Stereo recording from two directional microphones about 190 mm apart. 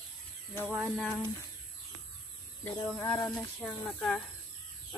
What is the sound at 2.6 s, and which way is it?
Speech, 20° left (ahead or behind).